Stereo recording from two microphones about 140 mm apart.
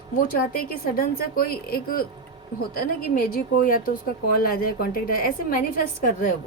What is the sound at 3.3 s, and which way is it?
A woman's voice, 85° left.